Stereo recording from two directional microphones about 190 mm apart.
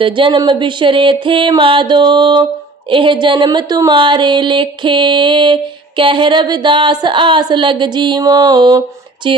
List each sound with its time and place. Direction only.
0.0 s a woman's voice: 25° right (ahead or behind)